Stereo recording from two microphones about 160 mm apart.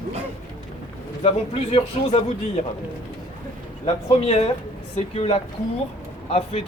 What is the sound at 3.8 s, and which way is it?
Speech, 40° left (ahead or behind).